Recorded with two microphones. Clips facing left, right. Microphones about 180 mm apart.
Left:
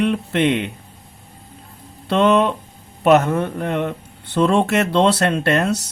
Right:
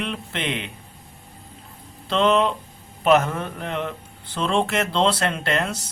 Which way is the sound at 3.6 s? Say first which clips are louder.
Left 6 dB; 55° left (ahead or behind).